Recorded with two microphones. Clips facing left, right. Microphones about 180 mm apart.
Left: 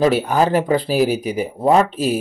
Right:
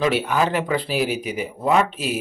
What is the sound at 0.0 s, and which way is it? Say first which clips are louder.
A man's voice: left 4 dB; 40° left (ahead or behind).